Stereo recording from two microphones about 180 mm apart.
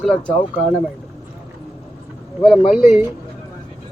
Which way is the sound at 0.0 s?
5° left (ahead or behind).